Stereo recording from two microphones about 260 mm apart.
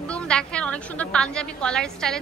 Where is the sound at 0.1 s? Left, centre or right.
Centre.